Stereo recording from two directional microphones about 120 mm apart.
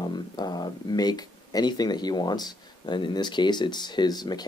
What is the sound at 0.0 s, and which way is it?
Speech, 35° left (ahead or behind).